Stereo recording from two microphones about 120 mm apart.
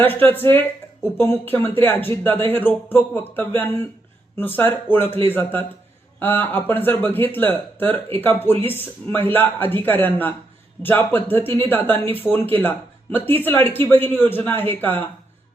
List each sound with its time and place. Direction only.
0.0 s speech: 15° left (ahead or behind)